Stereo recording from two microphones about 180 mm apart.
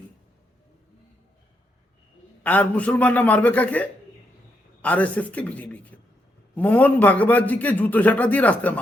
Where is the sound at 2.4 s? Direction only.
10° left (ahead or behind).